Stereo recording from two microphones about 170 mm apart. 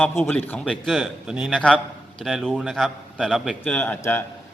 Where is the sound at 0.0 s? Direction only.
10° left (ahead or behind).